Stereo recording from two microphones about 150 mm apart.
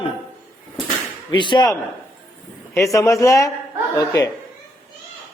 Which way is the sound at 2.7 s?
20° left (ahead or behind).